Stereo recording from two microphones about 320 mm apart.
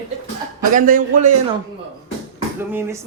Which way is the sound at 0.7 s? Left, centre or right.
Right.